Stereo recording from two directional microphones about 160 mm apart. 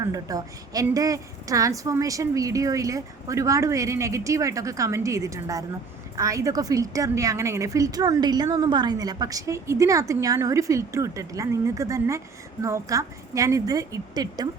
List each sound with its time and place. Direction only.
0.0 s a woman's voice: 20° right (ahead or behind)